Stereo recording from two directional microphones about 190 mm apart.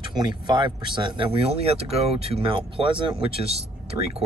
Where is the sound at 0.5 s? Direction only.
25° right (ahead or behind).